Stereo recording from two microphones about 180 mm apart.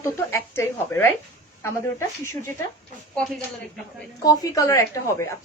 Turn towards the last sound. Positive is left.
turn(degrees=15)  # may be behind; listen again after turning